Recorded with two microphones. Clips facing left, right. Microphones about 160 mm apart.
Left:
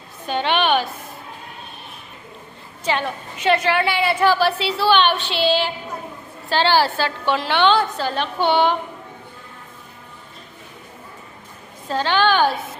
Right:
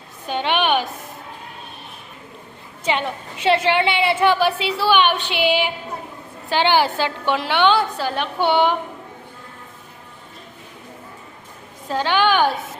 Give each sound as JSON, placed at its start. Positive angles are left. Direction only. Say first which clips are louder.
{"t": 0.3, "sound": "a sound", "louder": "left 1 dB", "side_deg": -10}
{"t": 2.8, "sound": "a woman's voice", "louder": "even", "side_deg": -20}
{"t": 11.9, "sound": "a woman's voice", "louder": "even", "side_deg": -15}